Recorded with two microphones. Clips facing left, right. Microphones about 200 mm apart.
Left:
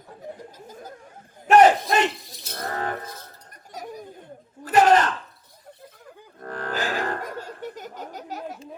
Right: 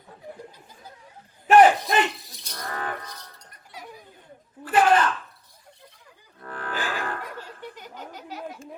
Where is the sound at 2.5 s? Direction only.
40° left (ahead or behind).